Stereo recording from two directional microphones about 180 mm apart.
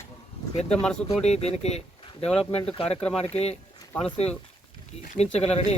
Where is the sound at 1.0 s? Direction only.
35° left (ahead or behind).